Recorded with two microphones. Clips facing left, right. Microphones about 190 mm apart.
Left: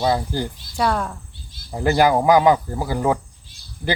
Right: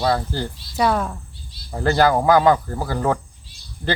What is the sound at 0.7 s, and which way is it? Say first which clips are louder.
Speech: right 2 dB; 5° right (ahead or behind).